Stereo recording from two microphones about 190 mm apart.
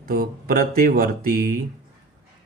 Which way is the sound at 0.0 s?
50° right (ahead or behind).